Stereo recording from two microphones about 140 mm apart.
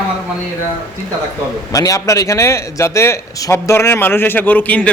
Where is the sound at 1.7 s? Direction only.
25° left (ahead or behind).